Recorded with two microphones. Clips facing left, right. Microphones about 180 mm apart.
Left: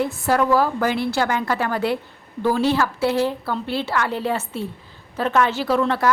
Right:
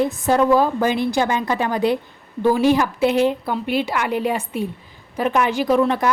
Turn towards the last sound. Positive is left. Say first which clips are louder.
# right 2 dB
turn(degrees=-15)  # may be behind; listen again after turning